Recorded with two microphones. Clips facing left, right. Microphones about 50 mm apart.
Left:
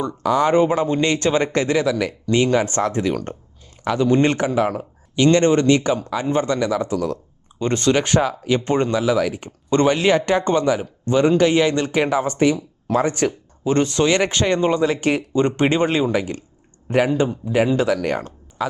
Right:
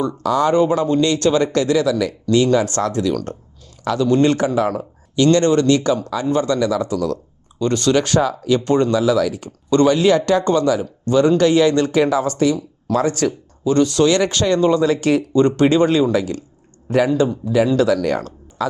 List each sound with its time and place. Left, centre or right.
0.2 s speech: centre